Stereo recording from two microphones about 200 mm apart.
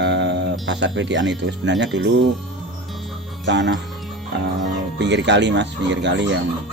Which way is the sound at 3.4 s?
60° right (ahead or behind).